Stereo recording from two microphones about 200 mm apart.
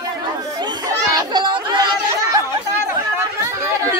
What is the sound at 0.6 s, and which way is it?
Chatter, 20° right (ahead or behind).